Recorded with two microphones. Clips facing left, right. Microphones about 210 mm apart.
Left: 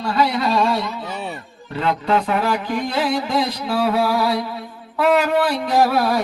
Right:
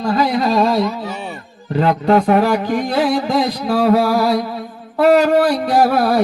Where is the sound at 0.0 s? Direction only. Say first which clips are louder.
Right 3 dB; 40° right (ahead or behind).